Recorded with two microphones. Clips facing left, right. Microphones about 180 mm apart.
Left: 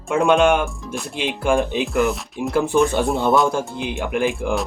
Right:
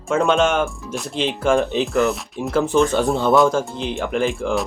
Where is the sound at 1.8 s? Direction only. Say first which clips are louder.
Right 1 dB; centre (ahead or behind).